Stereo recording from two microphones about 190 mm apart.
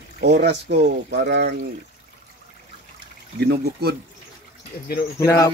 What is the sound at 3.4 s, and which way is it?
Speech, 55° right (ahead or behind).